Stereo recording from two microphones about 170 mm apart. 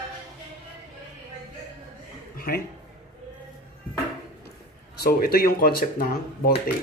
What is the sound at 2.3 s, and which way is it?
Speech, 60° left (ahead or behind).